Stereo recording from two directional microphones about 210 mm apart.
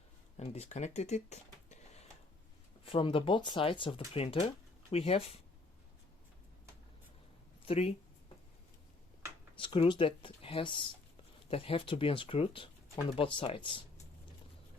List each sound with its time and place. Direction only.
0.3 s speech: 30° left (ahead or behind)
7.6 s speech: 30° left (ahead or behind)
9.6 s speech: 25° left (ahead or behind)